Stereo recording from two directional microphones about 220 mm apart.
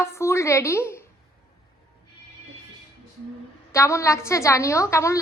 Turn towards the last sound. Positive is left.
turn(degrees=15)  # may be behind; listen again after turning